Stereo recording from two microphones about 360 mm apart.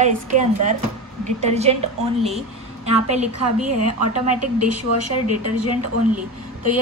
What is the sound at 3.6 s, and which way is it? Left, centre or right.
Speech, right.